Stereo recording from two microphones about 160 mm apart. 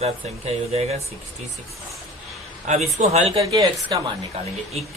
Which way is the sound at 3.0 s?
45° right (ahead or behind).